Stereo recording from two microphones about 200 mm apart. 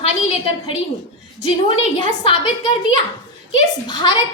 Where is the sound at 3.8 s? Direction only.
20° left (ahead or behind).